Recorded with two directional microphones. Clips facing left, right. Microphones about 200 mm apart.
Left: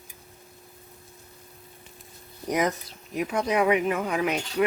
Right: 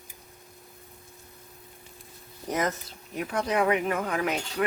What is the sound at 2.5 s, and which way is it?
Speech, 15° left (ahead or behind).